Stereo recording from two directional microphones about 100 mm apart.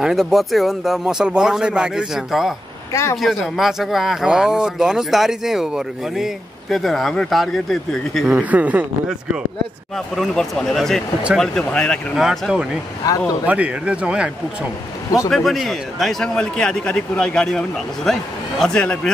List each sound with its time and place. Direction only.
0.0 s speech: 5° right (ahead or behind)
2.9 s speech: 30° left (ahead or behind)
3.2 s speech: centre (ahead or behind)
8.4 s speech: 15° right (ahead or behind)
9.9 s speech: centre (ahead or behind)
12.2 s speech: 5° right (ahead or behind)
15.2 s speech: centre (ahead or behind)